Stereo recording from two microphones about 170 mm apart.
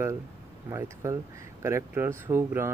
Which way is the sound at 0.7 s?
15° right (ahead or behind).